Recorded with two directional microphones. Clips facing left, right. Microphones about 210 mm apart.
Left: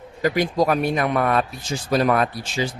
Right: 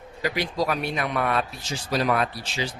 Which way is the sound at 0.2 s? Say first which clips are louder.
Left 6 dB; 45° left (ahead or behind).